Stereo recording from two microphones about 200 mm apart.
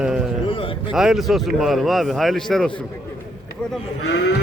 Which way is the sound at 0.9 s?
Centre (ahead or behind).